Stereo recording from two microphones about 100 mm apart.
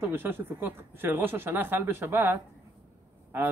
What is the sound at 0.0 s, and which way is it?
Speech, 25° right (ahead or behind).